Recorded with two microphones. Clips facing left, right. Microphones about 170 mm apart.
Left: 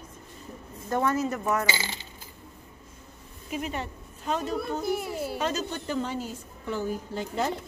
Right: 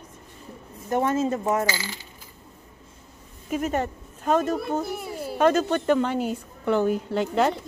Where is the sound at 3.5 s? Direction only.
50° right (ahead or behind); by 7.5 s 70° right (ahead or behind).